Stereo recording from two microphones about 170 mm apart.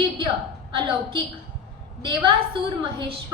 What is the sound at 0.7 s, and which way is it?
Speech, 30° right (ahead or behind).